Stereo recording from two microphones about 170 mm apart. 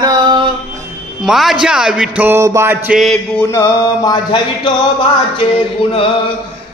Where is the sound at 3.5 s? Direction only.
20° left (ahead or behind).